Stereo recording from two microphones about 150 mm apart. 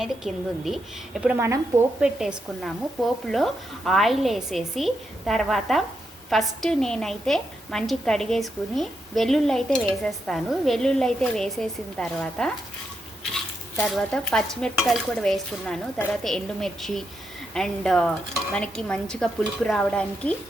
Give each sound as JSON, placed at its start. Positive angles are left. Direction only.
{"t": 0.0, "sound": "a woman's voice", "side_deg": 0}
{"t": 1.4, "sound": "speech", "side_deg": -20}
{"t": 2.0, "sound": "a woman's voice", "side_deg": -5}
{"t": 13.8, "sound": "a woman's voice", "side_deg": 0}